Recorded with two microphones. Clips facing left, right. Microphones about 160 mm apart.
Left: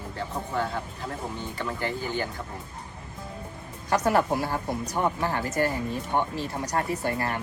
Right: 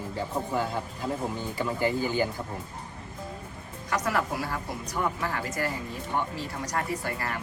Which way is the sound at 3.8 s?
30° left (ahead or behind).